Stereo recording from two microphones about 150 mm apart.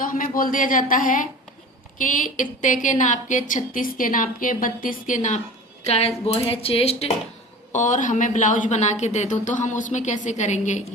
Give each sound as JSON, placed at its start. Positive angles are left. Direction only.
{"t": 0.0, "sound": "a woman's voice", "side_deg": 65}
{"t": 5.8, "sound": "speech", "side_deg": 45}
{"t": 7.7, "sound": "a woman's voice", "side_deg": 55}